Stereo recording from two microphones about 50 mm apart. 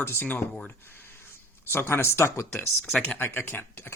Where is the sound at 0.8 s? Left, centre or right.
Left.